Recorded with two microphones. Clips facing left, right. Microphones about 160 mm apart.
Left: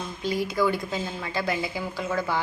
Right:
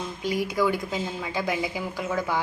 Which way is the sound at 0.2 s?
15° right (ahead or behind).